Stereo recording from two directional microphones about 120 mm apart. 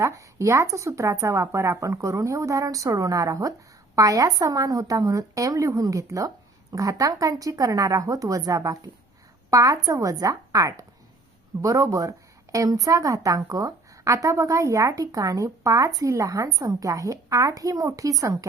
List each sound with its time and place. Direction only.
0.0 s a woman's voice: 25° right (ahead or behind)